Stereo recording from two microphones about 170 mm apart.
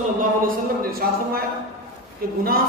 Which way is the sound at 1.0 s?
65° right (ahead or behind).